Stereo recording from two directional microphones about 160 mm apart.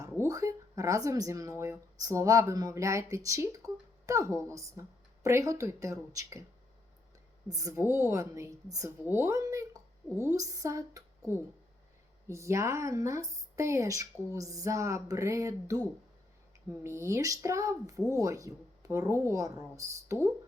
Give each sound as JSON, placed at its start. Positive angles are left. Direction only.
{"t": 0.0, "sound": "speech", "side_deg": -20}
{"t": 7.5, "sound": "speech", "side_deg": -20}
{"t": 12.3, "sound": "speech", "side_deg": -20}
{"t": 16.8, "sound": "speech", "side_deg": -15}